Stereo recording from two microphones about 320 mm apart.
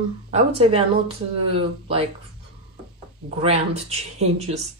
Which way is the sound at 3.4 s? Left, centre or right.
Centre.